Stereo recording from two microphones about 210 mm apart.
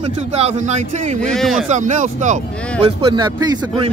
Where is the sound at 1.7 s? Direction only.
35° right (ahead or behind).